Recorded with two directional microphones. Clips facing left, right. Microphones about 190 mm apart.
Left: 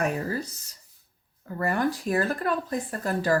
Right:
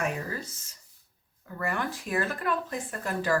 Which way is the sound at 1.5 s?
35° left (ahead or behind).